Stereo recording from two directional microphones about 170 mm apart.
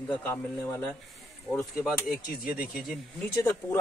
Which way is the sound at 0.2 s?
10° left (ahead or behind).